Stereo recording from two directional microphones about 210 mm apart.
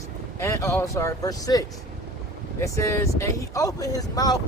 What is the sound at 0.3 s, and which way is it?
Speech, 15° left (ahead or behind).